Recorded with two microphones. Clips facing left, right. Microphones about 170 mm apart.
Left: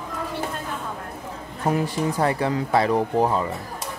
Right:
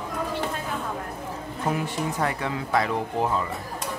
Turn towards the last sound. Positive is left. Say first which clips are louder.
# left 5 dB
turn(degrees=35)  # may be behind; listen again after turning